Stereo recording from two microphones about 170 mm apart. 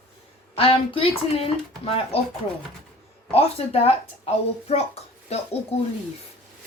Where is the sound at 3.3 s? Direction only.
35° left (ahead or behind).